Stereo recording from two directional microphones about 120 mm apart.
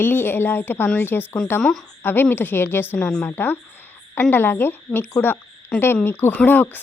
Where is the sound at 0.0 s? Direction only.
20° left (ahead or behind).